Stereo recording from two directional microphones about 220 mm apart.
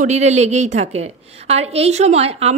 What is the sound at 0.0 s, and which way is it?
A woman's voice, 30° right (ahead or behind).